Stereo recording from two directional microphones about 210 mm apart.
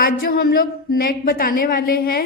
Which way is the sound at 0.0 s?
45° left (ahead or behind).